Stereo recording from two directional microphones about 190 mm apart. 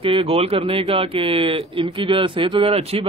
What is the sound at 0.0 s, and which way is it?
Speech, 30° right (ahead or behind).